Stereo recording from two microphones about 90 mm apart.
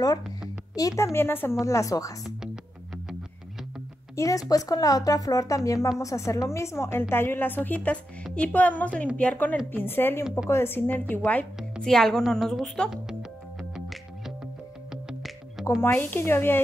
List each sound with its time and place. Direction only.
0.7 s speech: 35° left (ahead or behind)
4.1 s a woman's voice: 35° left (ahead or behind); by 11.4 s 15° left (ahead or behind)
11.8 s a woman's voice: 5° left (ahead or behind)
13.7 s music: 5° right (ahead or behind)
15.8 s a woman's voice: 20° left (ahead or behind)